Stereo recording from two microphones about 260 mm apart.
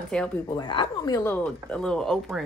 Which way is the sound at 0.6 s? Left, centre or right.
Centre.